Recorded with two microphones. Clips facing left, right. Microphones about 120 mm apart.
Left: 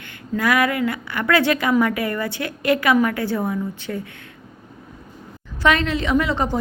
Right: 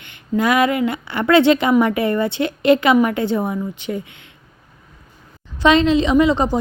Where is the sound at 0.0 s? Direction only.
25° right (ahead or behind).